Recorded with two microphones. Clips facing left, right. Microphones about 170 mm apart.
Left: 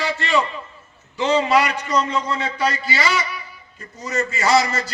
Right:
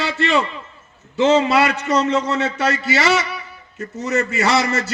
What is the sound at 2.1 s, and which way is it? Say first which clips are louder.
A man's voice: right 4 dB; 75° right (ahead or behind).